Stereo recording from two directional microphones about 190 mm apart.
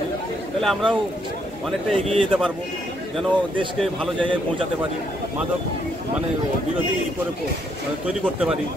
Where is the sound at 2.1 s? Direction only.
Centre (ahead or behind).